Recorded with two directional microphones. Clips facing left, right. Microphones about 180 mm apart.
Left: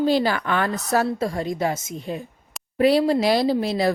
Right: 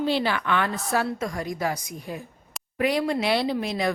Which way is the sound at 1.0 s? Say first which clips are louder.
Left 5 dB; 30° left (ahead or behind).